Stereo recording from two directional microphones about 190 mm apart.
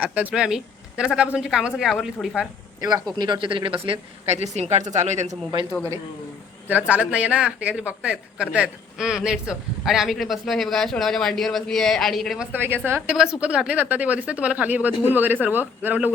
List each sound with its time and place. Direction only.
0.0 s speech: 5° right (ahead or behind)
3.2 s speech: 25° right (ahead or behind)
6.7 s a man's voice: 10° right (ahead or behind)